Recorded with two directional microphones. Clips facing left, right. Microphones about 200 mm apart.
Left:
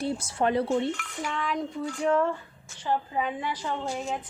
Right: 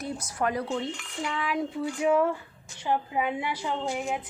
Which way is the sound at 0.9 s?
20° right (ahead or behind).